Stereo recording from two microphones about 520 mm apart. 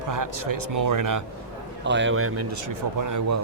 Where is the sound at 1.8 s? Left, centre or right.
Right.